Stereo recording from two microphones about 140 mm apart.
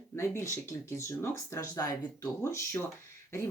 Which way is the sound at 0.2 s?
20° left (ahead or behind).